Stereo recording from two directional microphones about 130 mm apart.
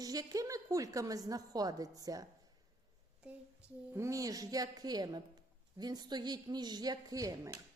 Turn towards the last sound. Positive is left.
turn(degrees=-25)  # may be behind; listen again after turning